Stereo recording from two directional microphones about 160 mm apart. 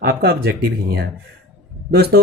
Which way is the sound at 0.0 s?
85° right.